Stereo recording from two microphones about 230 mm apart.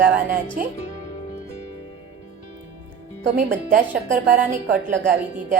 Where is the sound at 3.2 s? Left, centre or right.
Right.